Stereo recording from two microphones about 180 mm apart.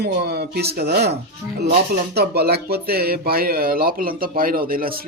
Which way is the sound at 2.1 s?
60° right (ahead or behind).